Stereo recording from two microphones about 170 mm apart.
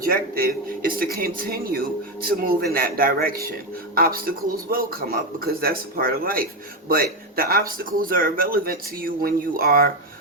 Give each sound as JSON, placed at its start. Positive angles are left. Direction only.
{"t": 0.0, "sound": "speech", "side_deg": -60}